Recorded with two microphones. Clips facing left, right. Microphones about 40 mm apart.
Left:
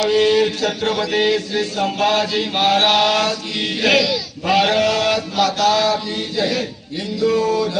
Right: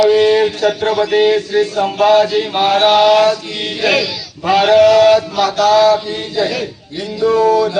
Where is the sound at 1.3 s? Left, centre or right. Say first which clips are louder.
Right 6 dB; right.